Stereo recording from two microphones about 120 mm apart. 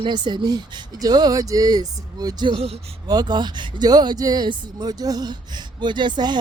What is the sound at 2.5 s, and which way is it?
Speech, 60° right (ahead or behind).